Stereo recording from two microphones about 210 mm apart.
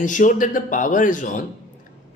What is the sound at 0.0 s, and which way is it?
Speech, 35° left (ahead or behind).